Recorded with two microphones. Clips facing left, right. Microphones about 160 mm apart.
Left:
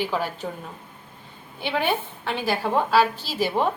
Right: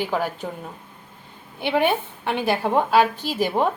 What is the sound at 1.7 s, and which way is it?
A woman's voice, 15° right (ahead or behind).